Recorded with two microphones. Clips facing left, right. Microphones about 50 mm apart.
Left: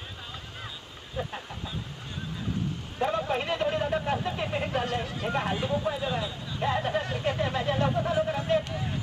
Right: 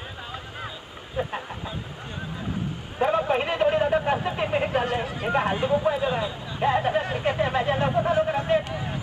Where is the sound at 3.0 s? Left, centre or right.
Right.